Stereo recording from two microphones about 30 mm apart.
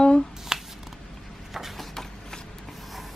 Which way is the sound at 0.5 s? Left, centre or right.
Right.